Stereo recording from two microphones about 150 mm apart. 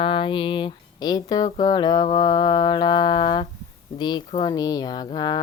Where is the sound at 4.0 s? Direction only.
30° left (ahead or behind).